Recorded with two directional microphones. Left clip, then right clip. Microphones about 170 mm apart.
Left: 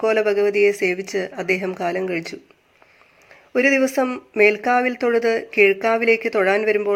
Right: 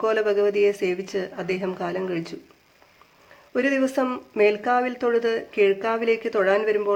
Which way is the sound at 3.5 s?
15° left (ahead or behind).